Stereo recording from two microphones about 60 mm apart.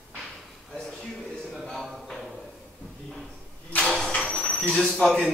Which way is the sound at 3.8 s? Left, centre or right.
Centre.